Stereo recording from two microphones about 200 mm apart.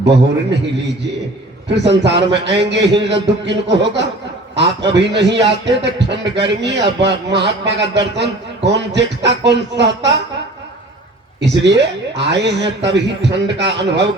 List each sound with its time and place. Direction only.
0.0 s a man's voice: 60° right (ahead or behind)
1.7 s a man's voice: 60° right (ahead or behind)
11.3 s a man's voice: 60° right (ahead or behind)